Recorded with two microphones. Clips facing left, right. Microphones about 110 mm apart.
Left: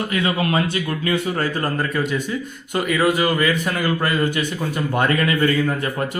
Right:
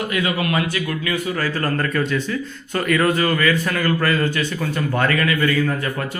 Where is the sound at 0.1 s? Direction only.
30° left (ahead or behind).